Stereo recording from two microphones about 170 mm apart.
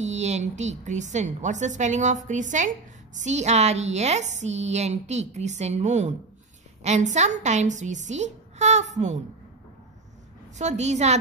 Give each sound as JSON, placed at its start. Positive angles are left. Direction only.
{"t": 0.0, "sound": "a woman's voice", "side_deg": -40}
{"t": 10.6, "sound": "a woman's voice", "side_deg": -45}